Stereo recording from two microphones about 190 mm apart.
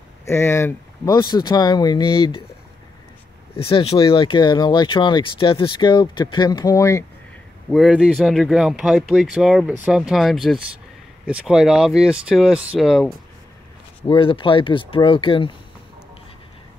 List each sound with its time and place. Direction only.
0.2 s speech: 15° left (ahead or behind)
3.5 s speech: 30° left (ahead or behind)
7.7 s speech: centre (ahead or behind)
14.0 s speech: 25° left (ahead or behind)